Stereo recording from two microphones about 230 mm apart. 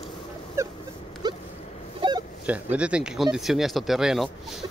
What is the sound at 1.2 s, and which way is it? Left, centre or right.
Dog, centre.